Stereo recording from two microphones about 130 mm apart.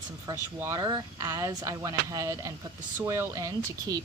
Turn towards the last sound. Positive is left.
turn(degrees=-25)  # may be behind; listen again after turning